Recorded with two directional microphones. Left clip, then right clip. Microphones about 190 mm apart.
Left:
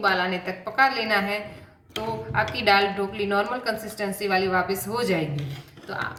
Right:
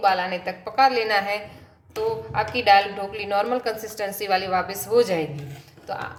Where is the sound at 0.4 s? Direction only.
35° right (ahead or behind).